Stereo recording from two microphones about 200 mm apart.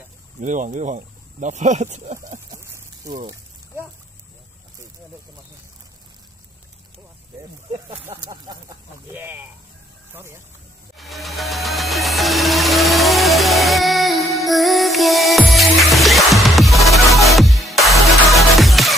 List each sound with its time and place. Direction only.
0.4 s speech: 40° right (ahead or behind)
2.5 s a sound: 15° right (ahead or behind)
8.0 s speech: 15° right (ahead or behind)
11.0 s music: centre (ahead or behind)